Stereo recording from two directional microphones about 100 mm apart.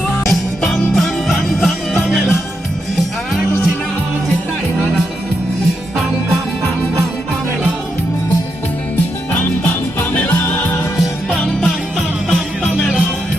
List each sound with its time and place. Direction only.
0.3 s music: centre (ahead or behind)
9.3 s music: 20° left (ahead or behind)
11.3 s music: 5° left (ahead or behind)
12.7 s music: 5° right (ahead or behind)